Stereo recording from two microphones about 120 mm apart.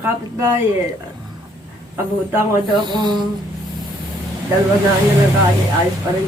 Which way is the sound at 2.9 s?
40° right (ahead or behind).